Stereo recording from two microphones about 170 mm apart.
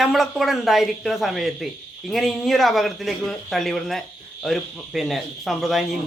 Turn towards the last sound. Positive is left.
turn(degrees=0)  # may be behind; listen again after turning